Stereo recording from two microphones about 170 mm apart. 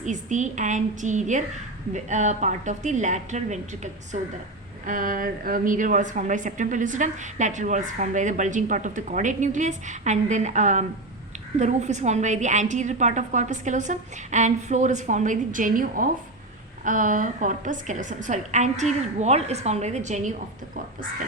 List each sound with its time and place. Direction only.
0.0 s a woman's voice: 45° right (ahead or behind)
4.9 s a woman's voice: 55° right (ahead or behind)